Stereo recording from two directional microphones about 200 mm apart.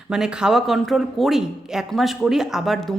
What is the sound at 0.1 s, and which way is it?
A woman's voice, 5° right (ahead or behind).